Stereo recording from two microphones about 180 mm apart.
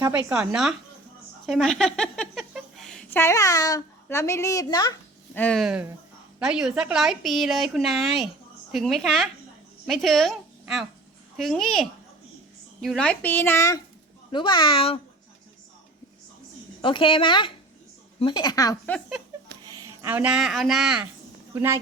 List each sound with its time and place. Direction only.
0.1 s a woman's voice: 5° right (ahead or behind)
3.1 s a child's voice: 15° left (ahead or behind)
5.3 s a woman's voice: 5° left (ahead or behind); by 15.0 s 30° left (ahead or behind)
16.8 s a child's voice: 30° left (ahead or behind)
20.0 s a woman's voice: 10° right (ahead or behind)